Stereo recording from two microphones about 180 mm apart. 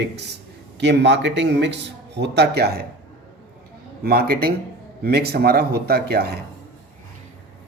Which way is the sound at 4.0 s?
60° right (ahead or behind).